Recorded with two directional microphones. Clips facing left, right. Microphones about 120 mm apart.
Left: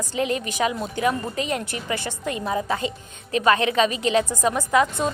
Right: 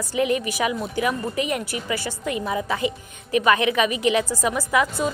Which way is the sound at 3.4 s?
30° left (ahead or behind).